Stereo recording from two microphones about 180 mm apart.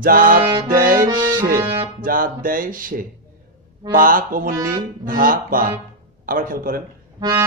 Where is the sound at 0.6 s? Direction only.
50° right (ahead or behind).